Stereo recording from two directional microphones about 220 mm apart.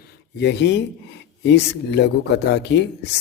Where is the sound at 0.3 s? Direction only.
50° left (ahead or behind).